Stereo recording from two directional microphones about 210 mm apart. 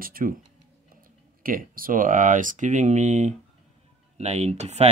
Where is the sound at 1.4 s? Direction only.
40° right (ahead or behind).